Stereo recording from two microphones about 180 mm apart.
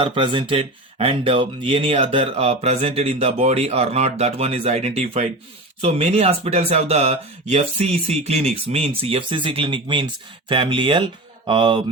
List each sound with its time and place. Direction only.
0.0 s speech: 30° right (ahead or behind)